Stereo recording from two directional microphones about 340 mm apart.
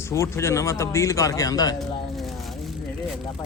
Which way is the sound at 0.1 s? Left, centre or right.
Centre.